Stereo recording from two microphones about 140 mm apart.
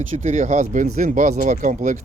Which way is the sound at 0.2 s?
60° right (ahead or behind).